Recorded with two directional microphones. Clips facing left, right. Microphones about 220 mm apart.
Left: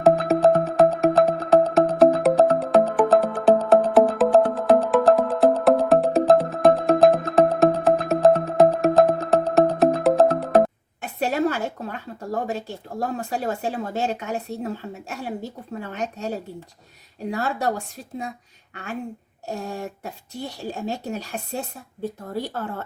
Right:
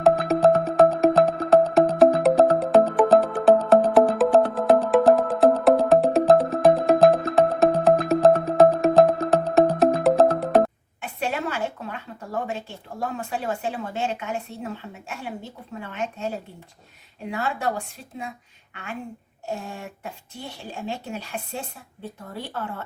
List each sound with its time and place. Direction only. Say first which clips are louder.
0.0 s music: left 1 dB; centre (ahead or behind)
11.0 s a woman's voice: left 5 dB; 40° left (ahead or behind)
17.3 s a woman's voice: left 2 dB; 40° left (ahead or behind)